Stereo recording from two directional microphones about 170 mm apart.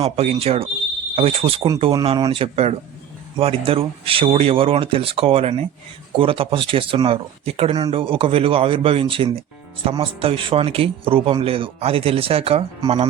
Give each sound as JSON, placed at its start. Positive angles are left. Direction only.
{"t": 0.0, "sound": "speech", "side_deg": -35}